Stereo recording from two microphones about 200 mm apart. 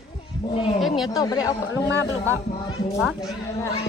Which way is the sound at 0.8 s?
Centre (ahead or behind).